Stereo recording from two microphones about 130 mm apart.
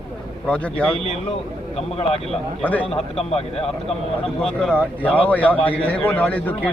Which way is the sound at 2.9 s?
50° left (ahead or behind).